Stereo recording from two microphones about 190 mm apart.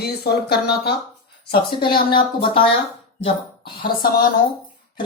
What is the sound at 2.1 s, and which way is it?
Speech, 25° left (ahead or behind).